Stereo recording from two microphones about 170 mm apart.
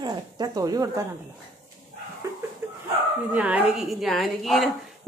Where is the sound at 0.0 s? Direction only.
25° right (ahead or behind).